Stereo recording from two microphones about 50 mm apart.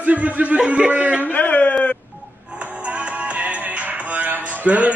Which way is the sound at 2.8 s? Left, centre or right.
Right.